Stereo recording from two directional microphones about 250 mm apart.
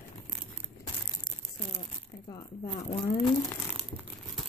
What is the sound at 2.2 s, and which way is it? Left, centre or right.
Speech, centre.